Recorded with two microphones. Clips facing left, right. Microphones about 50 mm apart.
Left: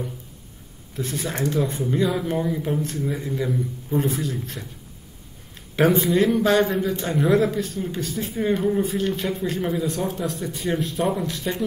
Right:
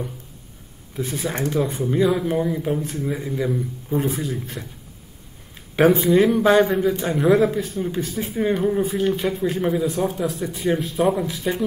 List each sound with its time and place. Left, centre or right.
0.9 s a man's voice: centre
5.8 s a man's voice: centre